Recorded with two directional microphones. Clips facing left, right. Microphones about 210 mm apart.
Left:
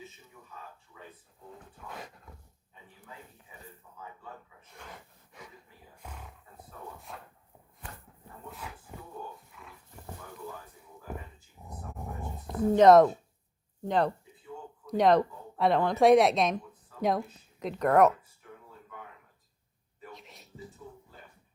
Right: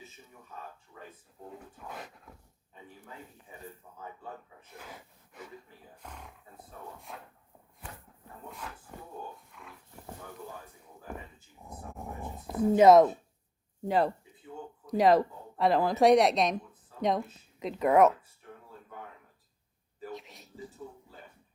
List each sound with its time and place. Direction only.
0.9 s drawer open or close: 45° right (ahead or behind)
2.0 s dog: centre (ahead or behind)
4.8 s gasp: 5° right (ahead or behind)
6.0 s roaring cats: 5° left (ahead or behind)
7.1 s a sound: centre (ahead or behind)
8.4 s dog: 5° left (ahead or behind)
11.1 s a sound: 5° left (ahead or behind)
11.7 s dog: 5° right (ahead or behind)
13.8 s a woman's voice: 5° right (ahead or behind)
20.1 s a sound: centre (ahead or behind)